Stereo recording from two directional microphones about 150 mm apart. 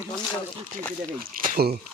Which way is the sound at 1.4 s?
70° right (ahead or behind).